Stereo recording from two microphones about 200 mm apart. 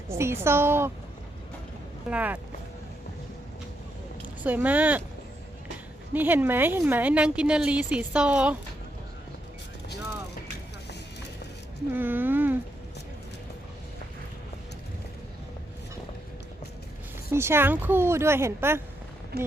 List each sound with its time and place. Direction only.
0.1 s a woman's voice: 15° right (ahead or behind)
2.0 s a woman's voice: 5° right (ahead or behind)
4.4 s a woman's voice: 10° right (ahead or behind)
6.1 s a woman's voice: 10° right (ahead or behind)
11.9 s a sound: 10° right (ahead or behind)
17.3 s a woman's voice: 10° right (ahead or behind)
19.3 s speech: 50° right (ahead or behind)